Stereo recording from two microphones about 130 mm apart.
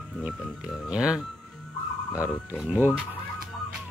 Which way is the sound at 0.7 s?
5° right (ahead or behind).